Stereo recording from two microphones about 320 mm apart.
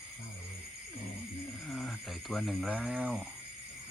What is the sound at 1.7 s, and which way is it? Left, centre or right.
Speech, centre.